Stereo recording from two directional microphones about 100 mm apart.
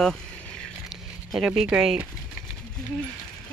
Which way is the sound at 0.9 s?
5° right (ahead or behind).